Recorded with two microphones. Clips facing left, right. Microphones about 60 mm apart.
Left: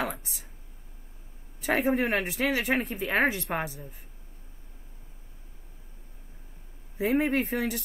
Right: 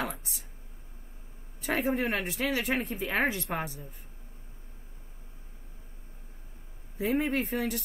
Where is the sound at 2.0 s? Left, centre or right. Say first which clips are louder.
Left 3 dB; centre.